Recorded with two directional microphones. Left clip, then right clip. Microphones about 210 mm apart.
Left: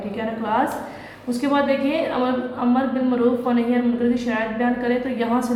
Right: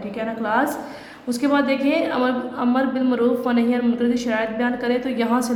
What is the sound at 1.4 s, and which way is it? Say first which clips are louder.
Speech: even; 45° right (ahead or behind).